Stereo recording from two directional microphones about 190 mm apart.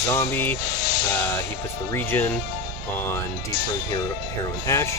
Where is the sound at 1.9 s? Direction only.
10° left (ahead or behind).